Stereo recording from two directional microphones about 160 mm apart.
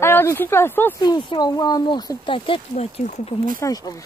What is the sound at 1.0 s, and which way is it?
Speech, 25° left (ahead or behind).